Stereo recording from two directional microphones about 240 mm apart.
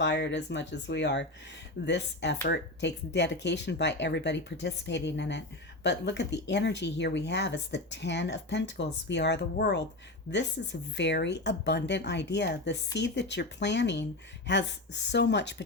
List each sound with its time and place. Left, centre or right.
0.0 s speech: left